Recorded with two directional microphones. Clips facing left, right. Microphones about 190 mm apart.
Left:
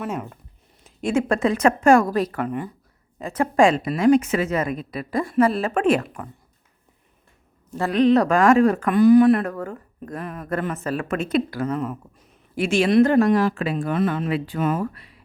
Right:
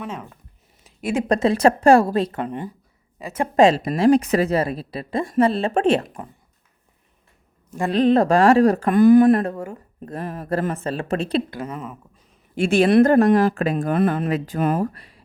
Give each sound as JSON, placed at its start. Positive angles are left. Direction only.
{"t": 0.0, "sound": "speech", "side_deg": 5}
{"t": 1.1, "sound": "a woman's voice", "side_deg": -20}
{"t": 1.5, "sound": "a woman's voice", "side_deg": -35}
{"t": 8.1, "sound": "speech", "side_deg": -30}
{"t": 10.1, "sound": "speech", "side_deg": -30}
{"t": 11.7, "sound": "speech", "side_deg": 0}
{"t": 12.7, "sound": "speech", "side_deg": -55}